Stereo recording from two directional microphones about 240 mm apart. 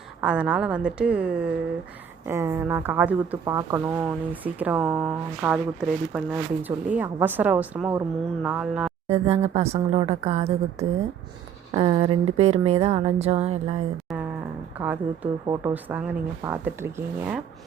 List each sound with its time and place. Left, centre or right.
0.2 s a woman's voice: centre
9.0 s speech: right
14.8 s speech: centre